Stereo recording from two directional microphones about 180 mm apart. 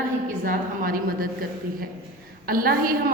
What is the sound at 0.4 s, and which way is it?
Speech, 50° right (ahead or behind).